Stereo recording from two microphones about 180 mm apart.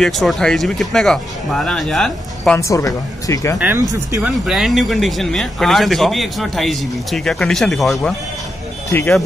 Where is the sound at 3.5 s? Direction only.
10° right (ahead or behind).